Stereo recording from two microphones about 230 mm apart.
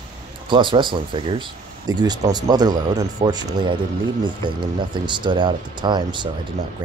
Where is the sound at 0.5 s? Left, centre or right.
Right.